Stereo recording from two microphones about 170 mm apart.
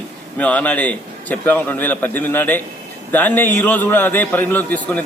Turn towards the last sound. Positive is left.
turn(degrees=10)  # may be behind; listen again after turning